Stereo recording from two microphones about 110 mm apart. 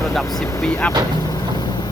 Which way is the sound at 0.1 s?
5° left (ahead or behind).